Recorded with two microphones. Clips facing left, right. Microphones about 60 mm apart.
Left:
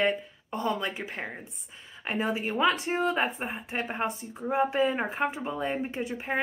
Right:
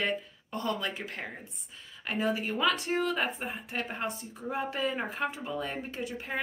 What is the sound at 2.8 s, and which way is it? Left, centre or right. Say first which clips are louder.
Speech: left 3 dB; centre.